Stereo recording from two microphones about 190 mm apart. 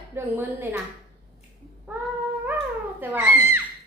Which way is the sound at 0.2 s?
10° right (ahead or behind).